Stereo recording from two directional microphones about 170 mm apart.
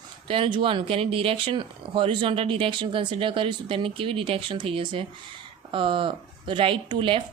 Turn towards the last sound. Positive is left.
turn(degrees=-30)  # may be behind; listen again after turning